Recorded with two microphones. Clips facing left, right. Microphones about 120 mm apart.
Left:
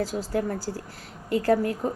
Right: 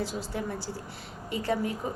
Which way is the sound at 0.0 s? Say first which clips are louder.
Left 6 dB; 45° left (ahead or behind).